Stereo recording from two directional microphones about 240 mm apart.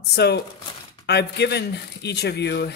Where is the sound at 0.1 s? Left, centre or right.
Left.